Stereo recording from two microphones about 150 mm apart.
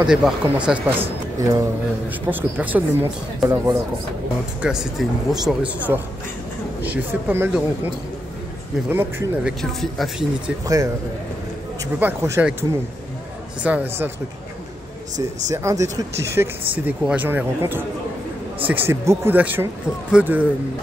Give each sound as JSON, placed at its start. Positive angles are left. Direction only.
{"t": 0.1, "sound": "speech", "side_deg": -5}
{"t": 4.6, "sound": "speech", "side_deg": -5}
{"t": 9.6, "sound": "speech", "side_deg": 0}
{"t": 12.0, "sound": "speech", "side_deg": -15}
{"t": 13.6, "sound": "speech", "side_deg": -10}
{"t": 15.5, "sound": "speech", "side_deg": -20}